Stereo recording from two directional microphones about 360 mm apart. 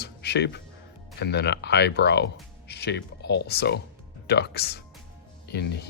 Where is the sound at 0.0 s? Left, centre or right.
Left.